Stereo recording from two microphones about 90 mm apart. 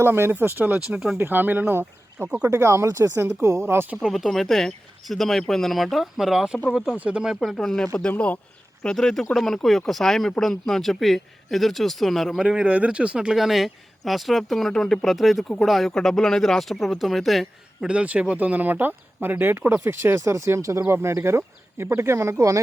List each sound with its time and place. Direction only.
0.0 s speech: 25° right (ahead or behind)
0.9 s speech: 10° right (ahead or behind)
1.2 s speech: 20° right (ahead or behind)
2.5 s speech: 30° right (ahead or behind)
4.1 s speech: centre (ahead or behind)
7.3 s speech: 5° left (ahead or behind)
8.1 s speech: 15° left (ahead or behind); by 17.8 s centre (ahead or behind)
17.8 s speech: 15° right (ahead or behind); by 22.6 s 35° right (ahead or behind)